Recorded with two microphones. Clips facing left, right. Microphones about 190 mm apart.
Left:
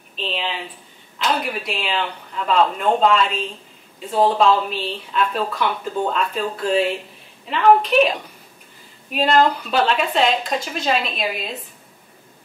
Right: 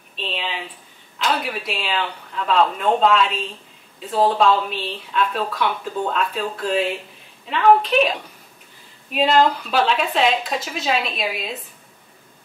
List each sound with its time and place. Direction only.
0.1 s speech: centre (ahead or behind)